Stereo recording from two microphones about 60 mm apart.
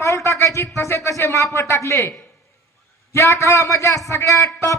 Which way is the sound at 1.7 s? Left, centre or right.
Left.